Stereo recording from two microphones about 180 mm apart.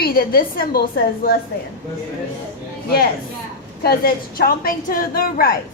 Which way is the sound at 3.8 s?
55° left (ahead or behind).